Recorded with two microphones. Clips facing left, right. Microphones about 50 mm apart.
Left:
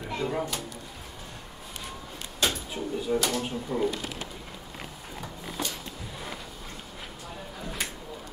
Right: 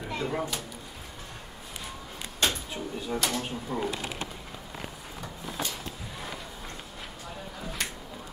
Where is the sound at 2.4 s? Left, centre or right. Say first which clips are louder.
Left 2 dB; centre.